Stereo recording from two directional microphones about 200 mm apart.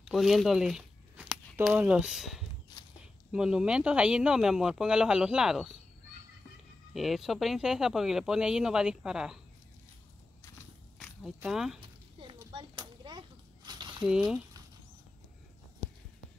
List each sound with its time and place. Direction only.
0.0 s speech: centre (ahead or behind)
6.9 s speech: centre (ahead or behind)
11.3 s speech: 5° right (ahead or behind)
12.3 s a sound: 25° right (ahead or behind)